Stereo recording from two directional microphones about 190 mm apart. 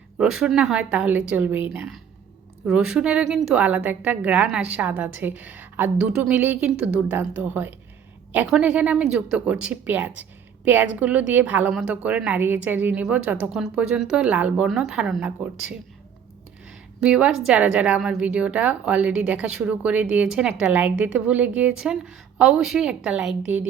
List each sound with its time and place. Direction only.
0.2 s a woman's voice: 5° right (ahead or behind)
17.0 s a woman's voice: 5° right (ahead or behind)